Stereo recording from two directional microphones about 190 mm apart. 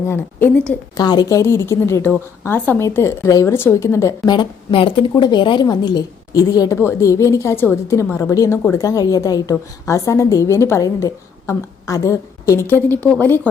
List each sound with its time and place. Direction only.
0.1 s a woman's voice: 10° left (ahead or behind)
0.9 s a woman's voice: 20° left (ahead or behind)